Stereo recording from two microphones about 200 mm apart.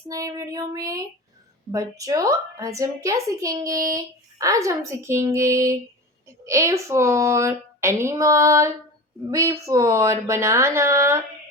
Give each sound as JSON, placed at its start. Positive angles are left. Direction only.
{"t": 0.1, "sound": "speech", "side_deg": -15}